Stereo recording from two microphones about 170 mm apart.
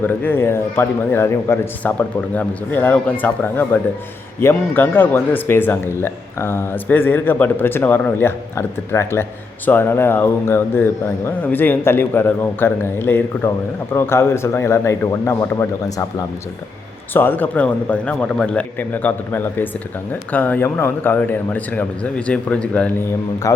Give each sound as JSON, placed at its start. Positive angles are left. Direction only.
{"t": 0.0, "sound": "a man's voice", "side_deg": 10}
{"t": 23.4, "sound": "a man's voice", "side_deg": 20}